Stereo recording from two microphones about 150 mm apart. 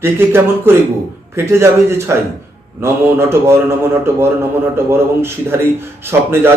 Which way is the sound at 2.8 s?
15° right (ahead or behind).